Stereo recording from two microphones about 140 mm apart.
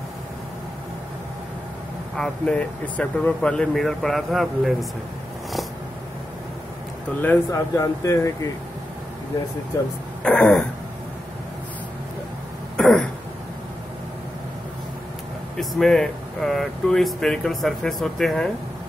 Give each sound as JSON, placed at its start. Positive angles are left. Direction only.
{"t": 2.1, "sound": "speech", "side_deg": 5}
{"t": 7.2, "sound": "speech", "side_deg": 20}
{"t": 10.2, "sound": "throat clearing", "side_deg": 5}
{"t": 12.7, "sound": "throat clearing", "side_deg": 5}
{"t": 15.5, "sound": "speech", "side_deg": 5}